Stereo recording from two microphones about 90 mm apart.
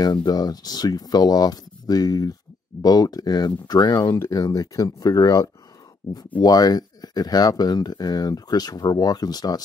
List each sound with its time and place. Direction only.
0.0 s speech: 45° left (ahead or behind)
4.2 s speech: 40° left (ahead or behind)